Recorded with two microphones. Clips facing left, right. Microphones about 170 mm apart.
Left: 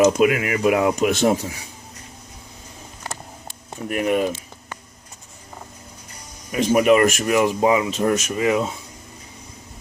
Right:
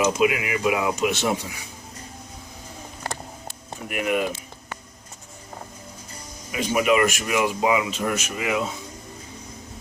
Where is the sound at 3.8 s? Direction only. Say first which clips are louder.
Left 4 dB; 35° left (ahead or behind).